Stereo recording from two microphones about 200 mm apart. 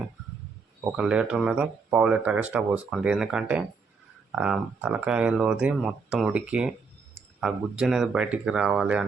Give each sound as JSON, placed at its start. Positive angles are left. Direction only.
{"t": 0.9, "sound": "speech", "side_deg": -5}